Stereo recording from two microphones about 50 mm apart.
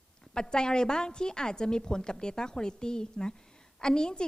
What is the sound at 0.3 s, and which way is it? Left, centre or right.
A woman's voice, centre.